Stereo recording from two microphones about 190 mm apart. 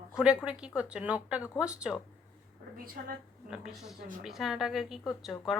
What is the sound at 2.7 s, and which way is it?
Speech, 50° right (ahead or behind).